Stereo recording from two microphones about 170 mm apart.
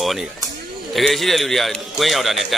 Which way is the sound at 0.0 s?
Centre (ahead or behind).